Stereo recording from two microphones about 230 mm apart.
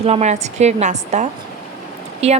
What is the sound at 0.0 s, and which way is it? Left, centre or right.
A woman's voice, right.